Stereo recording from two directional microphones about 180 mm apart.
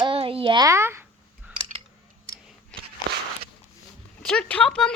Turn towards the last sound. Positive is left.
turn(degrees=5)  # may be behind; listen again after turning